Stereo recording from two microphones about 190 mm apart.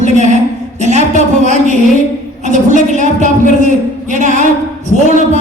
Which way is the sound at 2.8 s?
40° right (ahead or behind).